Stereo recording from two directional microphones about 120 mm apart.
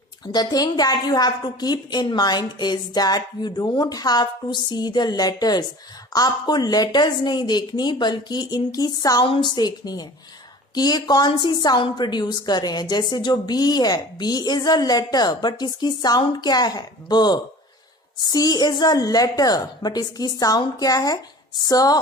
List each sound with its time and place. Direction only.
0.3 s a woman's voice: 35° left (ahead or behind)